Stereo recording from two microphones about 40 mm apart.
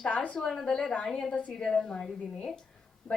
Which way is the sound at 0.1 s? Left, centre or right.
Left.